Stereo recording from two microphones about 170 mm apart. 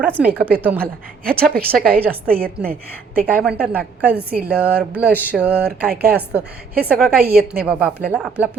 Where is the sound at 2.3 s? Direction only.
60° right (ahead or behind).